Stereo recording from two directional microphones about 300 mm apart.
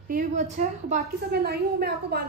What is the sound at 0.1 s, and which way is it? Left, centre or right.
A woman's voice, right.